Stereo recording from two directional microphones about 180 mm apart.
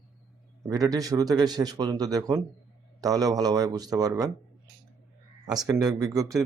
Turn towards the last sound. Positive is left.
turn(degrees=-20)  # may be behind; listen again after turning